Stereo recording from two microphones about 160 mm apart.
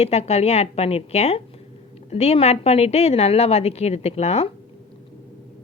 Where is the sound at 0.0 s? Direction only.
40° left (ahead or behind).